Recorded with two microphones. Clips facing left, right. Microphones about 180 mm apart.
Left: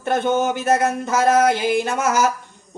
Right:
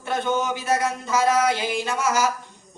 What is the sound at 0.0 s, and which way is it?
Speech, 55° left (ahead or behind).